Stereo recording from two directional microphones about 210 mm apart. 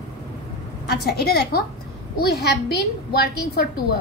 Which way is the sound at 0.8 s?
50° left (ahead or behind).